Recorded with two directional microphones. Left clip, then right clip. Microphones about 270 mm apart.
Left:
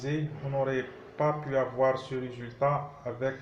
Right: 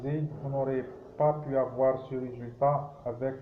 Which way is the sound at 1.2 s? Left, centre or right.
Left.